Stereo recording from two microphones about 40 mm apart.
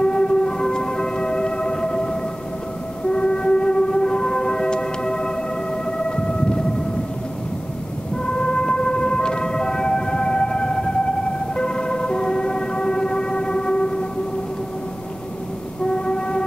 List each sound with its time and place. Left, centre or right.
0.0 s siren: left
3.1 s train: left
5.9 s siren: left
8.3 s siren: left
11.5 s emergency vehicle: centre
15.9 s music: left